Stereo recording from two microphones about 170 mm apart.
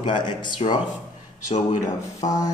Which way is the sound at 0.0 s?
30° left (ahead or behind).